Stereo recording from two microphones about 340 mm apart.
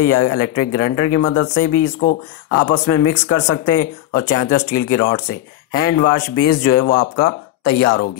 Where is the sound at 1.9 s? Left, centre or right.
Left.